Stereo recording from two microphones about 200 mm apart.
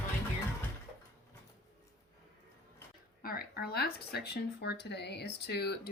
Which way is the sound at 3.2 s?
45° left (ahead or behind).